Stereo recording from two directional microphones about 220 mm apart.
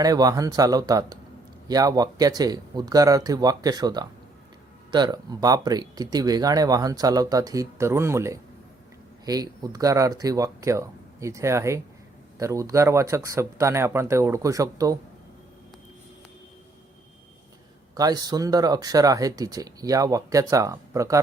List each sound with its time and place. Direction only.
0.0 s speech: 15° right (ahead or behind)
17.9 s speech: 15° right (ahead or behind)